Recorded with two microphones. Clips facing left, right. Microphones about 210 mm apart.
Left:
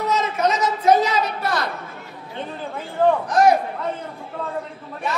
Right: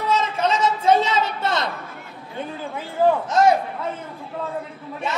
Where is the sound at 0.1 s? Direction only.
30° right (ahead or behind).